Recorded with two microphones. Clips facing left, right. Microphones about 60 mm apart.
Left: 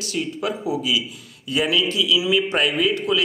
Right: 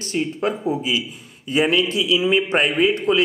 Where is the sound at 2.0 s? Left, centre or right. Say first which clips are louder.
Right 1 dB; right.